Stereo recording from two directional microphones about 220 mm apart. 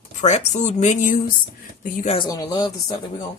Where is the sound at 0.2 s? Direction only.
30° left (ahead or behind).